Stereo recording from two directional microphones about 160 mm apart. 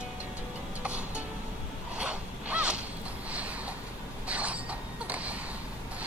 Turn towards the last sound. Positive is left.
turn(degrees=-10)  # may be behind; listen again after turning